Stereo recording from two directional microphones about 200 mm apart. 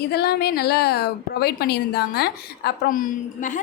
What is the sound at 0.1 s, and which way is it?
A woman's voice, 50° left (ahead or behind).